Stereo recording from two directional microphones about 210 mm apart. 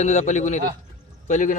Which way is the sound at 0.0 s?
35° left (ahead or behind).